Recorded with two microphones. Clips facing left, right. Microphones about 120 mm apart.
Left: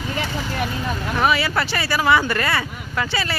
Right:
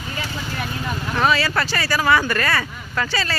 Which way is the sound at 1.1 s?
15° left (ahead or behind).